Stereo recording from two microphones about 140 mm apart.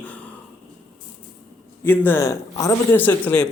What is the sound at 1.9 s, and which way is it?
A man's voice, 15° left (ahead or behind).